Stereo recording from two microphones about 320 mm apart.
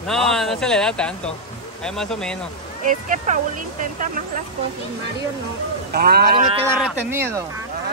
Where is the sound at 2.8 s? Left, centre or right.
Right.